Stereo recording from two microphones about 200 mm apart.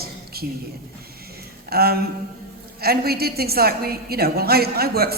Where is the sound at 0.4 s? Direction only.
50° right (ahead or behind).